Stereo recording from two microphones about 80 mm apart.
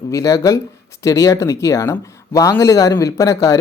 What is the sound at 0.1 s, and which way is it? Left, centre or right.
Speech, left.